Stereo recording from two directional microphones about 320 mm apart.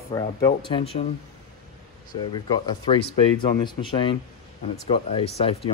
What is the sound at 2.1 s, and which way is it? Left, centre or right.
Speech, centre.